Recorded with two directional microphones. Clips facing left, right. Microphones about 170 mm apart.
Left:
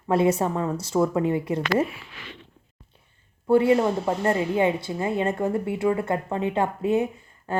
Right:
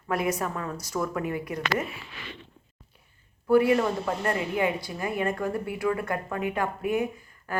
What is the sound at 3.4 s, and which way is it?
Speech, 25° left (ahead or behind).